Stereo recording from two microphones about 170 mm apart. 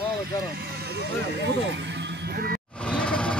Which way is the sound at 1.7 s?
90° right.